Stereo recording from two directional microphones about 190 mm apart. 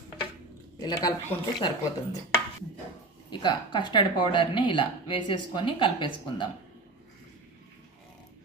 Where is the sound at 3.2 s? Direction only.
25° left (ahead or behind).